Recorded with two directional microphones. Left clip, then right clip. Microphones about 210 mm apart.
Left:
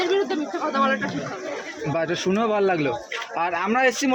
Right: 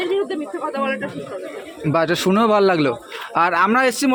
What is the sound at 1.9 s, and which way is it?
A man's voice, 30° right (ahead or behind).